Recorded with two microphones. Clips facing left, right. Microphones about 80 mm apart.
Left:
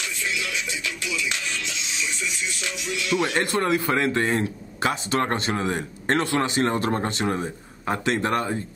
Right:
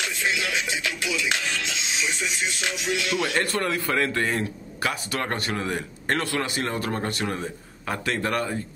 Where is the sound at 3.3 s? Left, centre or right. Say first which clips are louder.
Left 3 dB; left.